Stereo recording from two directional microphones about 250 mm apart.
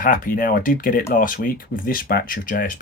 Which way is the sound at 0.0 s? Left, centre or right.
Left.